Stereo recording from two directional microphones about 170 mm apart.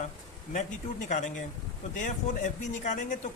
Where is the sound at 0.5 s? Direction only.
45° left (ahead or behind).